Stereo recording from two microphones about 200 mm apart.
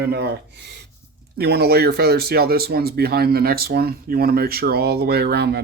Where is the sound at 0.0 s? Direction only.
55° right (ahead or behind).